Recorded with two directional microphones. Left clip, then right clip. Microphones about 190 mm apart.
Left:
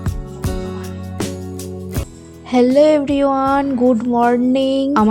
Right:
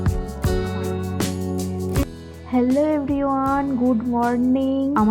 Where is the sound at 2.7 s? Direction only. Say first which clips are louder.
Left 10 dB; 45° left (ahead or behind).